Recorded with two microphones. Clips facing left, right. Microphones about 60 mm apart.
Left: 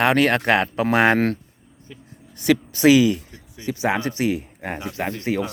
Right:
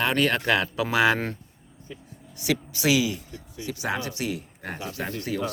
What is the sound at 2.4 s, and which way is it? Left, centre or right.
Speech, left.